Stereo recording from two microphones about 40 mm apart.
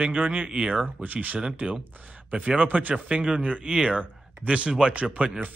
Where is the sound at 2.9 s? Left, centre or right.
Right.